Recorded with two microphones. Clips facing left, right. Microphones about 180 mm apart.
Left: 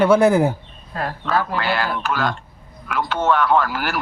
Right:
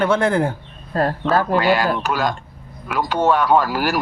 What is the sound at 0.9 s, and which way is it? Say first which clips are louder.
Speech: right 4 dB; 40° right (ahead or behind).